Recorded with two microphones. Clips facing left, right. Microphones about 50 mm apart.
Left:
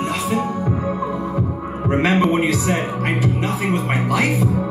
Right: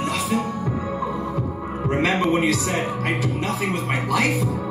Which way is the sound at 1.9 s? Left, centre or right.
Left.